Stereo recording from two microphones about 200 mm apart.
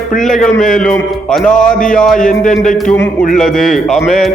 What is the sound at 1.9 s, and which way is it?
A man's voice, centre (ahead or behind).